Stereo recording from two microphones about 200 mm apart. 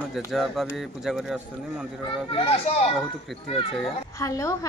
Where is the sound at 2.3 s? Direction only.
30° left (ahead or behind).